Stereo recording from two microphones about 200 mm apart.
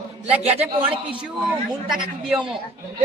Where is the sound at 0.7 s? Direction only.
25° right (ahead or behind).